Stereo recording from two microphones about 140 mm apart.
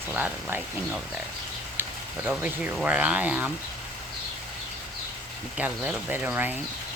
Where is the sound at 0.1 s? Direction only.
10° right (ahead or behind).